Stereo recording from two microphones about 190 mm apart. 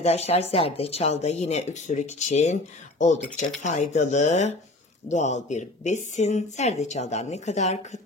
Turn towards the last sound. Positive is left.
turn(degrees=40)  # may be behind; listen again after turning